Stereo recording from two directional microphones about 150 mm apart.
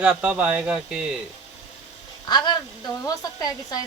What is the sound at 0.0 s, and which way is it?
A man's voice, 5° right (ahead or behind).